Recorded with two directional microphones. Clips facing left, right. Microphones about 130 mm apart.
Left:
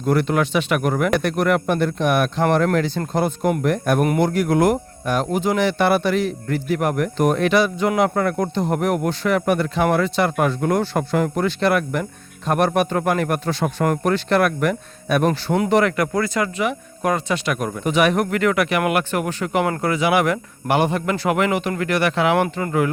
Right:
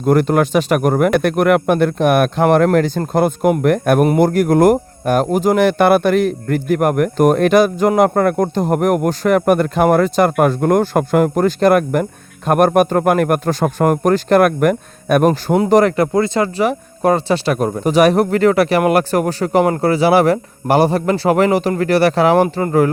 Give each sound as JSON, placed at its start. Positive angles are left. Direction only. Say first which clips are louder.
{"t": 0.0, "sound": "speech", "louder": "right 5 dB", "side_deg": -45}
{"t": 4.2, "sound": "speech", "louder": "right 6 dB", "side_deg": -45}
{"t": 15.5, "sound": "speech", "louder": "right 5 dB", "side_deg": -35}